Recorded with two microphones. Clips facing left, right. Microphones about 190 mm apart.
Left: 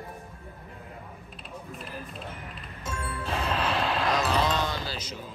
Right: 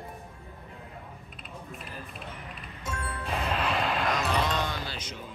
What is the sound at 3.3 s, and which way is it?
Music, centre (ahead or behind).